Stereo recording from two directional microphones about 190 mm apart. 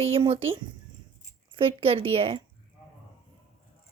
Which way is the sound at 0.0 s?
30° right (ahead or behind).